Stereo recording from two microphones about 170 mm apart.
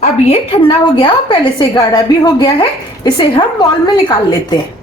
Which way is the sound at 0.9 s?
25° left (ahead or behind).